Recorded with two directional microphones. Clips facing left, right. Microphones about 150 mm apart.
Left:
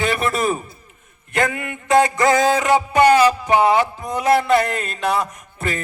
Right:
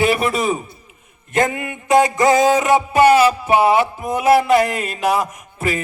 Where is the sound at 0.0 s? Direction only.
10° right (ahead or behind).